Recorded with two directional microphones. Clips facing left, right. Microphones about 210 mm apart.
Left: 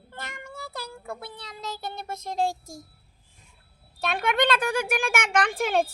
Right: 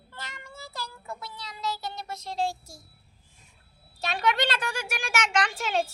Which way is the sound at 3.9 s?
55° left (ahead or behind).